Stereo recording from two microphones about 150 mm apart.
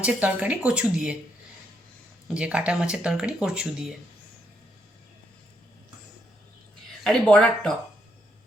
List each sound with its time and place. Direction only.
0.0 s speech: 10° right (ahead or behind)
2.2 s speech: 5° right (ahead or behind)
7.0 s speech: 5° left (ahead or behind)